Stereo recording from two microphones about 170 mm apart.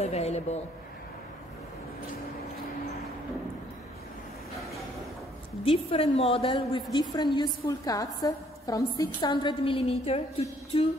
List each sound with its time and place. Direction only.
0.0 s a woman's voice: 40° left (ahead or behind)
5.7 s a woman's voice: 35° left (ahead or behind)